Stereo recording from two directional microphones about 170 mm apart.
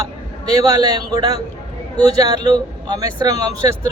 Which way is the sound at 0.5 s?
20° right (ahead or behind).